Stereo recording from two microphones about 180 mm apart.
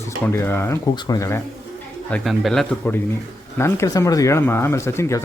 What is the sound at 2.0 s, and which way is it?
A man's voice, 5° left (ahead or behind).